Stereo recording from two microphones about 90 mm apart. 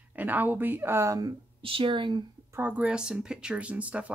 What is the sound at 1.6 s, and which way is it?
Speech, 80° right.